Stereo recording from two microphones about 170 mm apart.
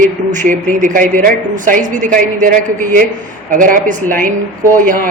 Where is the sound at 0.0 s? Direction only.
50° right (ahead or behind).